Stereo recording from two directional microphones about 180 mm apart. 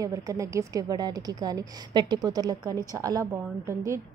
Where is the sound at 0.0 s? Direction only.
20° right (ahead or behind).